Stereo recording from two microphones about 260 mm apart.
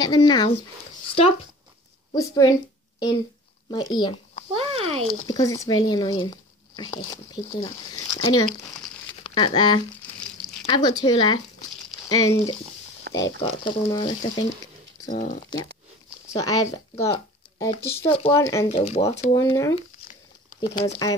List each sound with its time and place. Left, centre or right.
0.0 s speech: centre
1.0 s a sound: left
2.1 s speech: centre
3.7 s speech: centre
4.6 s speech: right
5.3 s speech: centre
8.6 s crumpling: centre
9.2 s speech: centre
13.1 s a sound: right
13.4 s speech: centre
15.0 s speech: left
16.3 s speech: centre
18.7 s speech: left
19.3 s speech: centre